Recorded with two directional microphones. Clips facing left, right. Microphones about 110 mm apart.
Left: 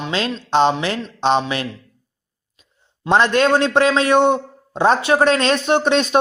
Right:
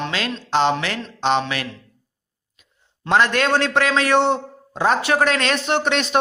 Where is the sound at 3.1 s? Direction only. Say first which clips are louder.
Left 3 dB; 25° left (ahead or behind).